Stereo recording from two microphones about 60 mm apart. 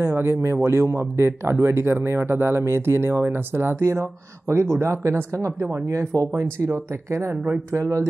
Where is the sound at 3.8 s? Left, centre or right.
Right.